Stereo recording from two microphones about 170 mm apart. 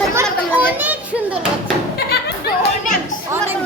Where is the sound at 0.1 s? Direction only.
15° right (ahead or behind).